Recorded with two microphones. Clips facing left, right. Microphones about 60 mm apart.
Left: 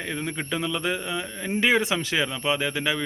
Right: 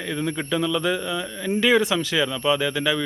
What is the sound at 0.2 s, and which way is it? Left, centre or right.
A man's voice, centre.